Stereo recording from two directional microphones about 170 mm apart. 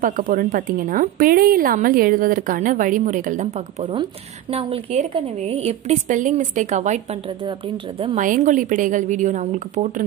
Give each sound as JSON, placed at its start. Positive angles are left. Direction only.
{"t": 0.0, "sound": "a woman's voice", "side_deg": -50}
{"t": 3.8, "sound": "a woman's voice", "side_deg": -30}
{"t": 8.0, "sound": "a woman's voice", "side_deg": -45}